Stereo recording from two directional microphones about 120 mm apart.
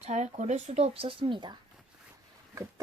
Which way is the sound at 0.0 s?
70° right (ahead or behind).